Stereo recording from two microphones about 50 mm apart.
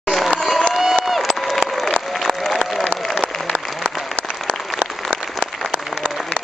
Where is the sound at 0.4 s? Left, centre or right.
Centre.